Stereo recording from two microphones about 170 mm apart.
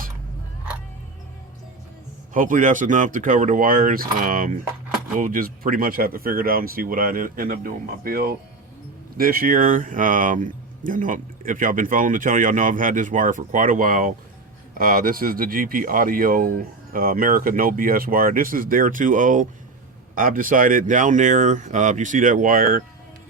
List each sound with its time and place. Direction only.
2.3 s speech: 50° right (ahead or behind)